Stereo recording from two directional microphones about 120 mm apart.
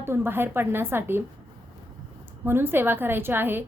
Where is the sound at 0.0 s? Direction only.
20° right (ahead or behind).